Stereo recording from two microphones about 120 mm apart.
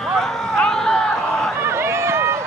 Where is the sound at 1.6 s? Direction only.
20° right (ahead or behind).